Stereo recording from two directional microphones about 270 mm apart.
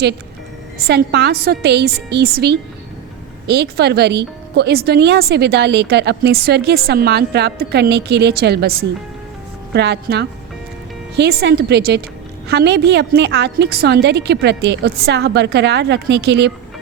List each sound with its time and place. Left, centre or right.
0.9 s speech: right